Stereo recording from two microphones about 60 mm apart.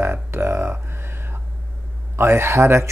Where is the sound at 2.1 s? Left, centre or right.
Right.